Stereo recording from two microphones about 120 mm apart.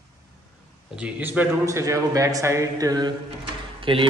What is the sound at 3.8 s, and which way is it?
Speech, 45° right (ahead or behind).